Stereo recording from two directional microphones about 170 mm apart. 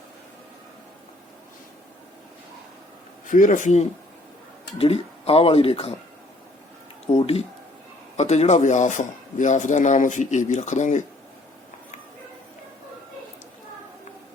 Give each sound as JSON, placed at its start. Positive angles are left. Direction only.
{"t": 3.2, "sound": "speech", "side_deg": 50}
{"t": 4.8, "sound": "speech", "side_deg": 35}
{"t": 7.2, "sound": "speech", "side_deg": 35}